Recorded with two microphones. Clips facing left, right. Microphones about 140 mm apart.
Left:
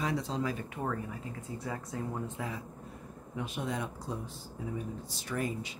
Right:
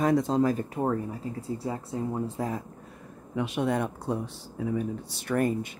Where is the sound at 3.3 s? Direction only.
75° right (ahead or behind); by 5.7 s 55° right (ahead or behind).